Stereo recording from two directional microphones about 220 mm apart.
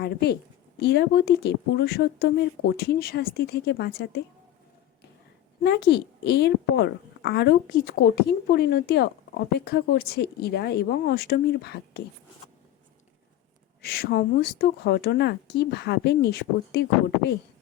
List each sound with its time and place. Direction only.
0.0 s a woman's voice: 45° left (ahead or behind)
5.6 s a woman's voice: 50° left (ahead or behind)
13.8 s a woman's voice: 45° left (ahead or behind)